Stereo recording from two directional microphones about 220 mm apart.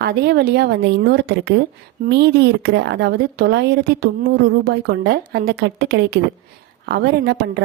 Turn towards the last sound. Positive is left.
turn(degrees=-45)  # may be behind; listen again after turning